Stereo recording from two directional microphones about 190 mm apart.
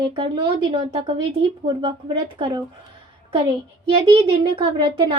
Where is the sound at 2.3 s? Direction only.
25° right (ahead or behind).